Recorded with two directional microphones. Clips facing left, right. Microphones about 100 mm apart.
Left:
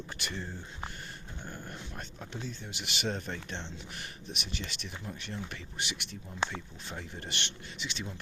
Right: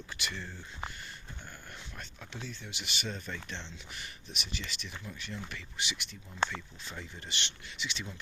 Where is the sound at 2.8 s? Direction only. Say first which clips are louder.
Left 5 dB; 65° left (ahead or behind).